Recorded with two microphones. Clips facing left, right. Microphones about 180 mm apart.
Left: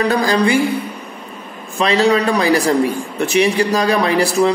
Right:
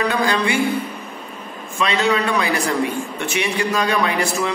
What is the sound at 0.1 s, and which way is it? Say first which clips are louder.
Speech: left 5 dB; 40° left (ahead or behind).